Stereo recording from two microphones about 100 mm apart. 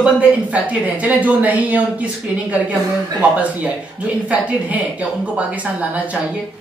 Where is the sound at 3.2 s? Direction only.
15° right (ahead or behind).